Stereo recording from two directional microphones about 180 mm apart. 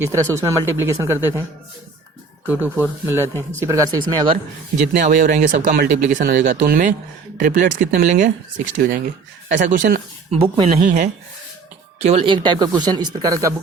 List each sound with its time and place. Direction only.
0.0 s speech: 15° right (ahead or behind)
2.5 s speech: 10° right (ahead or behind)
4.9 s speech: 45° right (ahead or behind); by 13.5 s 20° right (ahead or behind)